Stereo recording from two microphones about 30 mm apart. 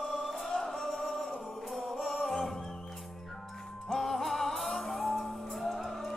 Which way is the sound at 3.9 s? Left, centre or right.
Centre.